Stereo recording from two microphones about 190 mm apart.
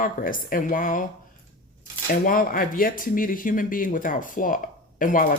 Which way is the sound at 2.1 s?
45° left (ahead or behind).